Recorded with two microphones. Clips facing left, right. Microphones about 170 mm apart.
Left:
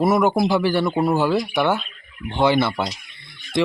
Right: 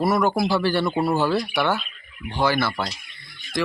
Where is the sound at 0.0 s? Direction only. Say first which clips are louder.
Left 3 dB; 20° left (ahead or behind).